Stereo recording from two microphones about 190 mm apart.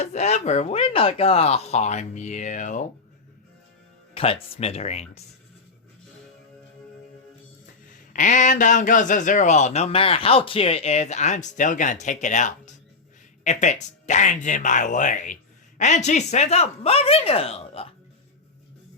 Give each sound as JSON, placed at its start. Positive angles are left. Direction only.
{"t": 0.0, "sound": "speech", "side_deg": 35}
{"t": 4.1, "sound": "speech", "side_deg": 30}
{"t": 8.1, "sound": "speech", "side_deg": 40}